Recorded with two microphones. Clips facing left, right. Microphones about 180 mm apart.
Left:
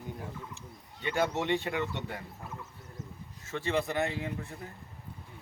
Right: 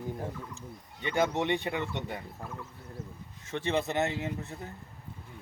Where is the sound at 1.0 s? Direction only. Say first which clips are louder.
Right 2 dB; 20° right (ahead or behind).